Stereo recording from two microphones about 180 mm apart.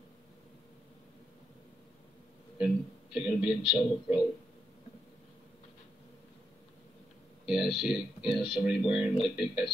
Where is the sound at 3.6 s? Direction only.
25° left (ahead or behind).